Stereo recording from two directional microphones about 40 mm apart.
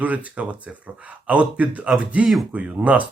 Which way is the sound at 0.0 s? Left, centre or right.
Right.